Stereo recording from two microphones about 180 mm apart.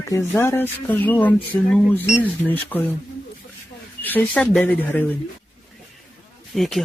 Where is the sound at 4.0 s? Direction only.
10° left (ahead or behind).